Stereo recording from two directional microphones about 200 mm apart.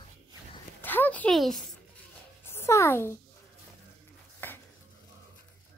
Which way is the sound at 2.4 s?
10° left (ahead or behind).